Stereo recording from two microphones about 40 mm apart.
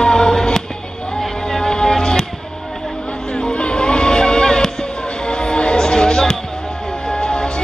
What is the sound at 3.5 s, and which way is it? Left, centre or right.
Music, left.